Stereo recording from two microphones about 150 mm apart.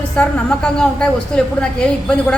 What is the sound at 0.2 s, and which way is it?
Speech, 5° left (ahead or behind).